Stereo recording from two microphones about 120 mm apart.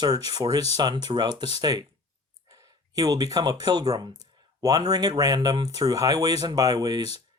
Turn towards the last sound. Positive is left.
turn(degrees=-30)  # may be behind; listen again after turning